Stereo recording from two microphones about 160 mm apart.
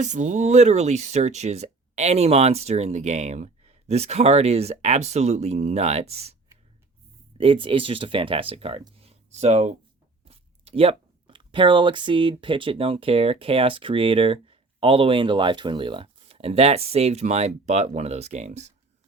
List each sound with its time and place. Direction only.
0.0 s speech: 50° right (ahead or behind)
7.3 s speech: 35° right (ahead or behind)